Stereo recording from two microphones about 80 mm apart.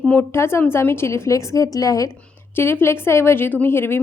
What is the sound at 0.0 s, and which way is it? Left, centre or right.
Speech, left.